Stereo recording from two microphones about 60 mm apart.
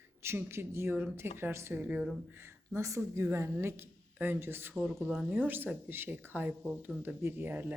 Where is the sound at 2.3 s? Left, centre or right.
Right.